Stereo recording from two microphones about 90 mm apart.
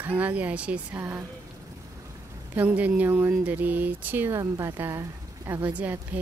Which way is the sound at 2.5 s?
15° right (ahead or behind).